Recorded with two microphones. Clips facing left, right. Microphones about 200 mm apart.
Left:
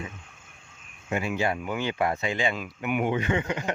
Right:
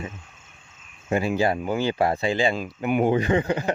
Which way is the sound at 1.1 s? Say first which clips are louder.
Right 5 dB; 35° right (ahead or behind).